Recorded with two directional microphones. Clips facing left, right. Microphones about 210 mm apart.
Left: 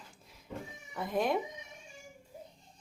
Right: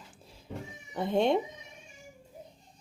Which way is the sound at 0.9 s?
30° right (ahead or behind).